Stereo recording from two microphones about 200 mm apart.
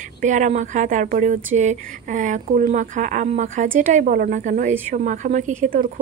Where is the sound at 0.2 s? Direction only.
40° right (ahead or behind).